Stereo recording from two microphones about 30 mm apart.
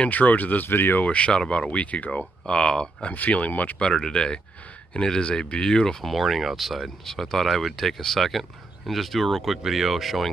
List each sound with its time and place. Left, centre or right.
0.1 s speech: left
1.0 s speech: left
2.4 s speech: left
3.1 s speech: left
3.8 s speech: left
6.0 s speech: centre
7.1 s speech: centre
7.4 s speech: centre
7.7 s speech: centre